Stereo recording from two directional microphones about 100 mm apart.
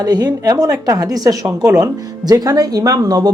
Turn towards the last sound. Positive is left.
turn(degrees=-40)  # may be behind; listen again after turning